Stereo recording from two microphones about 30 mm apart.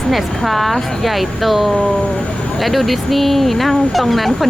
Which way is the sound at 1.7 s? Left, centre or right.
Left.